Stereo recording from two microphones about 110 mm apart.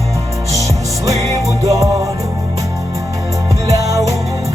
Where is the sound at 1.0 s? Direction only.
30° right (ahead or behind).